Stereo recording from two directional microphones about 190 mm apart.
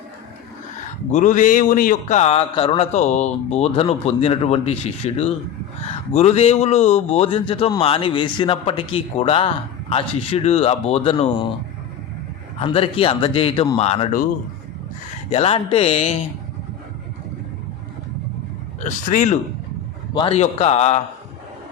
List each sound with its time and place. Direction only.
1.1 s a man's voice: 40° left (ahead or behind)
12.5 s a man's voice: 30° left (ahead or behind)
15.3 s a man's voice: 30° left (ahead or behind)
18.9 s a man's voice: 40° left (ahead or behind)